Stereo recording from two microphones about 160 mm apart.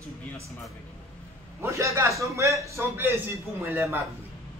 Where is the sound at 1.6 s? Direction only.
20° right (ahead or behind).